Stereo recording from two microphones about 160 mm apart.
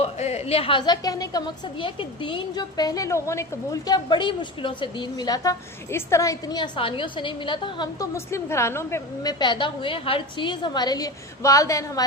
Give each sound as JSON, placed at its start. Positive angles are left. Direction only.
{"t": 0.0, "sound": "a woman's voice", "side_deg": 40}
{"t": 8.1, "sound": "a woman's voice", "side_deg": 15}
{"t": 9.4, "sound": "a woman's voice", "side_deg": 30}